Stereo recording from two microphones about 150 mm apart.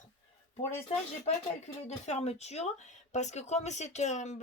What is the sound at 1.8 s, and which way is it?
Speech, 50° left (ahead or behind).